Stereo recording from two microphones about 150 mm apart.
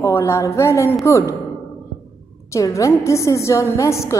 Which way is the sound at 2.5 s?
20° left (ahead or behind).